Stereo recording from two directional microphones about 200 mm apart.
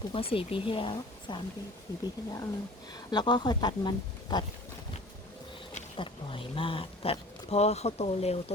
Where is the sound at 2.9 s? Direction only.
20° left (ahead or behind).